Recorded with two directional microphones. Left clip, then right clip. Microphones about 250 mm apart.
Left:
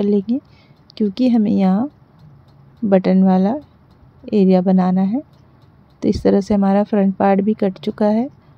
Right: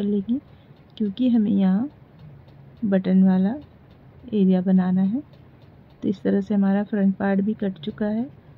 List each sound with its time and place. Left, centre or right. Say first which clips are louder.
0.0 s speech: left 8 dB; left
2.9 s speech: left 8 dB; left